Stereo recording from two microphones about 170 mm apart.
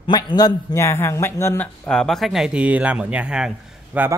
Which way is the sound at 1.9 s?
5° left (ahead or behind).